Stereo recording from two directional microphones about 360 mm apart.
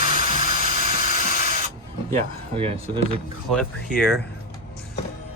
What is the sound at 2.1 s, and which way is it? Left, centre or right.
Speech, centre.